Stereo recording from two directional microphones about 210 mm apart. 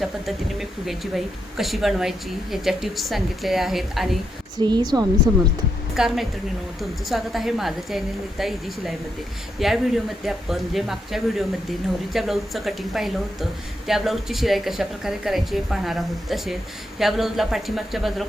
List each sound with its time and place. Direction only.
0.0 s a woman's voice: centre (ahead or behind)
4.5 s a woman's voice: 20° right (ahead or behind)
5.9 s a woman's voice: centre (ahead or behind)